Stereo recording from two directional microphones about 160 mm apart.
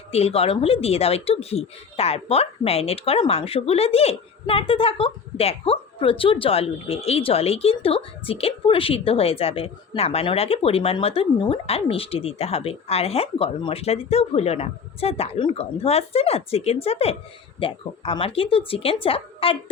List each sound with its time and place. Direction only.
0.1 s speech: 40° left (ahead or behind)